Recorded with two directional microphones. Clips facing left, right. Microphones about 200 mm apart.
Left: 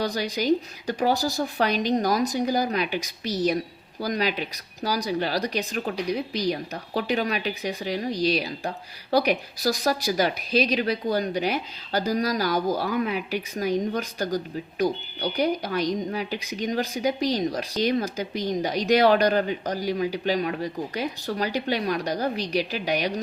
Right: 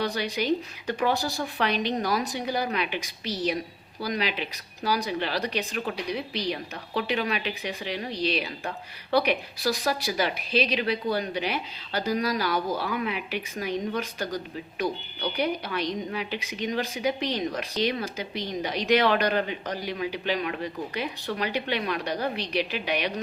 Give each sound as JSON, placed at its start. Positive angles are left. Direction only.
{"t": 0.0, "sound": "speech", "side_deg": 40}